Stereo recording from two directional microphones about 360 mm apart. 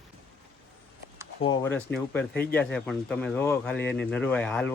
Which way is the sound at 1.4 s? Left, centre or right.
Centre.